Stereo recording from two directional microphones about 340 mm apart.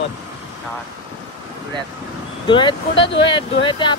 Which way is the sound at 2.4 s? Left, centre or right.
Centre.